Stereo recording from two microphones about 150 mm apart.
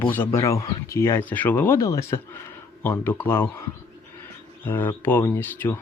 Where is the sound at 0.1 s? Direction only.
20° left (ahead or behind).